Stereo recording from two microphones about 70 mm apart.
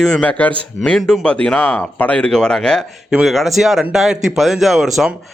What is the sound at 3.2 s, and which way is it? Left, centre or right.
Speech, centre.